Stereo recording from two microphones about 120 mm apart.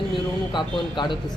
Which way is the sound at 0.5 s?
40° left (ahead or behind).